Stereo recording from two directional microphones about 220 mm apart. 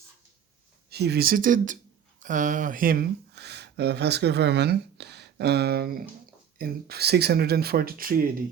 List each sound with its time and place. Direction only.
0.9 s speech: 45° right (ahead or behind)